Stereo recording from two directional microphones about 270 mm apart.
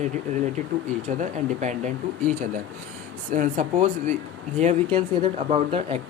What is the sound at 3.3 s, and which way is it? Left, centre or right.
Speech, right.